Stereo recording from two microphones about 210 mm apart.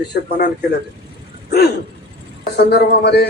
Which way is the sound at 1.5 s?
50° left (ahead or behind).